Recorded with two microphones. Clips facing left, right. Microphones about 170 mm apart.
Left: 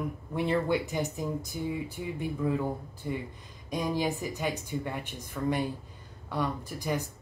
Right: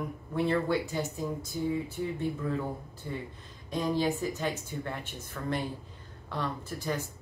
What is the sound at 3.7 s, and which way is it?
A woman's voice, 15° left (ahead or behind).